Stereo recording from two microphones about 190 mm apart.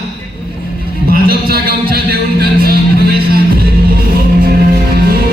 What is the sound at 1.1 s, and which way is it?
Music, 55° right (ahead or behind).